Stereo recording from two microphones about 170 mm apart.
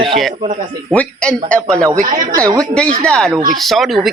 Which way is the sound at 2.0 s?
50° right (ahead or behind).